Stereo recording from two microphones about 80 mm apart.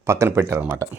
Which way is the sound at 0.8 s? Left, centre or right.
Right.